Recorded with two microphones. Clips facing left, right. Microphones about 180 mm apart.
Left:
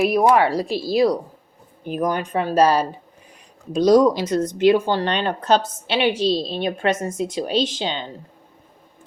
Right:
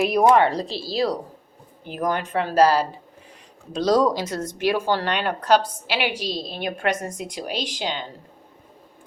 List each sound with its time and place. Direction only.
0.0 s a woman's voice: 5° left (ahead or behind); by 8.0 s 25° left (ahead or behind)